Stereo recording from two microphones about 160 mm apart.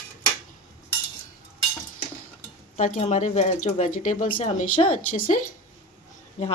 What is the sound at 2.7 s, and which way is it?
A woman's voice, 50° left (ahead or behind).